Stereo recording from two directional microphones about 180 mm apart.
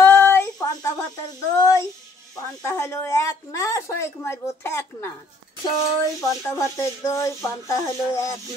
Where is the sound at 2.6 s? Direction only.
15° left (ahead or behind).